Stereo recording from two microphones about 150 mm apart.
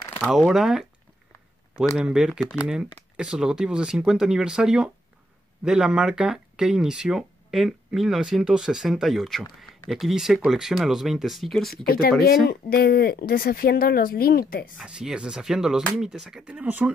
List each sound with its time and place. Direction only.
0.3 s speech: centre (ahead or behind)
2.0 s speech: 5° right (ahead or behind)
11.7 s speech: 85° left
14.8 s speech: 5° right (ahead or behind)